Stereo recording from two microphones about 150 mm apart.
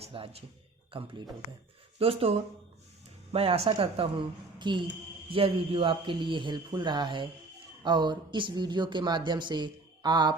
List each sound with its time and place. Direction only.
0.0 s a man's voice: 40° right (ahead or behind)
3.3 s speech: 40° right (ahead or behind)